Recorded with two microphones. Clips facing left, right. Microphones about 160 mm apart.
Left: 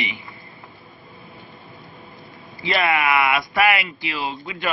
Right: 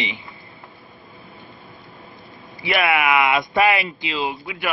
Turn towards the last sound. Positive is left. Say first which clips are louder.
# right 2 dB
turn(degrees=-15)  # may be behind; listen again after turning